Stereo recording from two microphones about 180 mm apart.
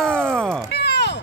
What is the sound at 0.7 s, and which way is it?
Music, 65° left (ahead or behind).